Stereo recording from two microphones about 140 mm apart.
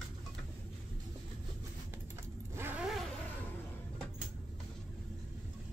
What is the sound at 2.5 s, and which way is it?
Zipper, 15° right (ahead or behind).